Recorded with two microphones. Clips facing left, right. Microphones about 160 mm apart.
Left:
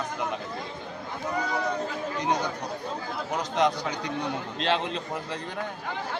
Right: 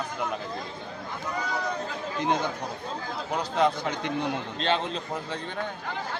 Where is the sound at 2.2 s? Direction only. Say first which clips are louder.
Right 1 dB; 15° left (ahead or behind).